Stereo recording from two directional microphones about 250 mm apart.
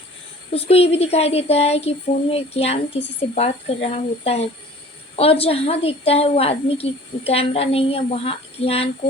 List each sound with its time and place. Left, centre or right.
0.5 s a woman's voice: left